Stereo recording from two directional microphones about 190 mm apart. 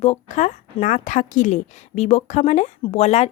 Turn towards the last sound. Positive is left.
turn(degrees=35)  # may be behind; listen again after turning